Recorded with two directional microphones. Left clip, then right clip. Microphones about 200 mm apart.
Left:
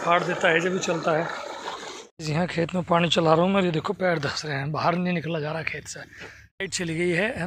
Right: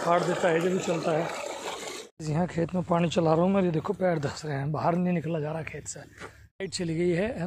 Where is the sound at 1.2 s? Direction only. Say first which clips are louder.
Left 2 dB; 25° right (ahead or behind).